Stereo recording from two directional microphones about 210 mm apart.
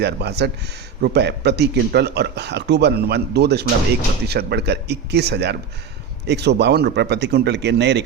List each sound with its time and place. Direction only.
0.0 s speech: 50° right (ahead or behind)